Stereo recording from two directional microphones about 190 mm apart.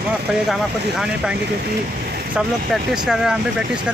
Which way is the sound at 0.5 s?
5° right (ahead or behind).